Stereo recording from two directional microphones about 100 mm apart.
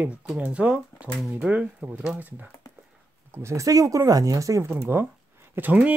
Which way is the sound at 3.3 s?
30° right (ahead or behind).